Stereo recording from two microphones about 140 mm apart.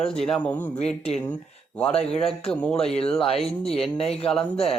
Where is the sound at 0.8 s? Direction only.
50° left (ahead or behind).